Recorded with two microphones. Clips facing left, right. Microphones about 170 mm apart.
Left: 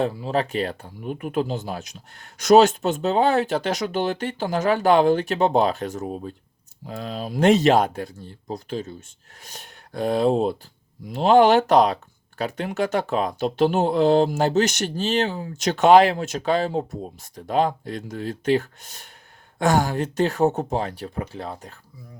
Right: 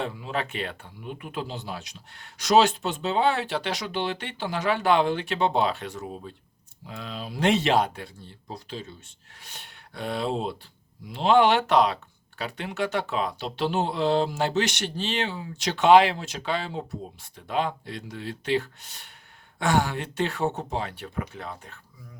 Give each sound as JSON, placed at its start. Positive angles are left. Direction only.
{"t": 0.0, "sound": "speech", "side_deg": 35}